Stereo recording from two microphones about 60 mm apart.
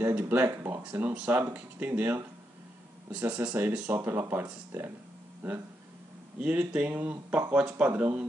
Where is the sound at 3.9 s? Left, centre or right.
Right.